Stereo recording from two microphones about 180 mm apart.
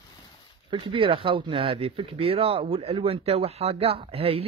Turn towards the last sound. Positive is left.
turn(degrees=-35)  # may be behind; listen again after turning